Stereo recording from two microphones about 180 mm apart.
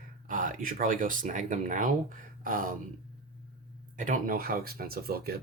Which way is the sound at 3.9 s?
45° right (ahead or behind).